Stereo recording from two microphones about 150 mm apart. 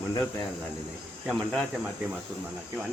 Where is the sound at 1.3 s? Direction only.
10° left (ahead or behind).